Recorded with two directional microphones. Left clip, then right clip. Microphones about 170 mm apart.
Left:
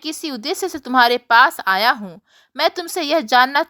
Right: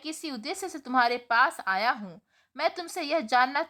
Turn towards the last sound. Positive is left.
turn(degrees=35)  # may be behind; listen again after turning